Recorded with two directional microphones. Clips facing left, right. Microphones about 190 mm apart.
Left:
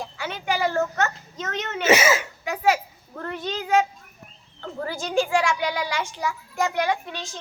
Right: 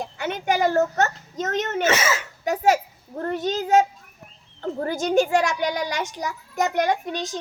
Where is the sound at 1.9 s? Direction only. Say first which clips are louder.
Left 8 dB; 10° left (ahead or behind).